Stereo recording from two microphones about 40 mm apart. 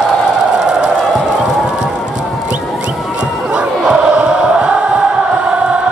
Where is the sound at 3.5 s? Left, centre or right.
Right.